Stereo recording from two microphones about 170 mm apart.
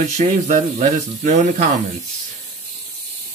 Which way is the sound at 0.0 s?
45° right (ahead or behind).